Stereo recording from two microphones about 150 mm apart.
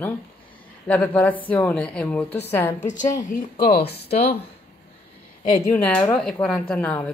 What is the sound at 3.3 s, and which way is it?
Speech, 70° left (ahead or behind).